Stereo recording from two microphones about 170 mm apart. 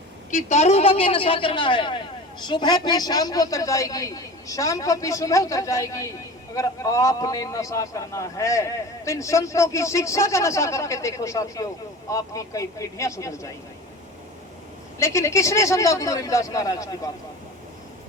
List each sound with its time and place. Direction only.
0.3 s a man's voice: 45° left (ahead or behind); by 13.5 s 20° left (ahead or behind)
14.9 s a man's voice: 15° left (ahead or behind)